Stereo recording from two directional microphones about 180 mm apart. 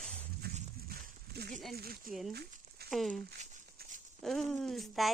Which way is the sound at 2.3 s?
65° right (ahead or behind).